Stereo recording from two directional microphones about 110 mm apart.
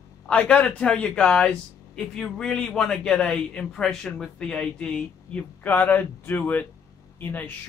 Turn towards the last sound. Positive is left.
turn(degrees=15)  # may be behind; listen again after turning